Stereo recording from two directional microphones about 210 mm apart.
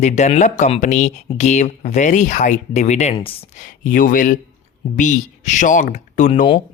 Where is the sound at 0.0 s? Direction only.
35° left (ahead or behind).